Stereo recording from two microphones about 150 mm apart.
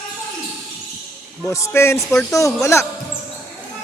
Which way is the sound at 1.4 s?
20° left (ahead or behind).